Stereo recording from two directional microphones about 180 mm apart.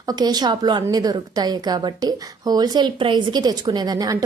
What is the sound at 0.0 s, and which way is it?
A woman's voice, 20° right (ahead or behind).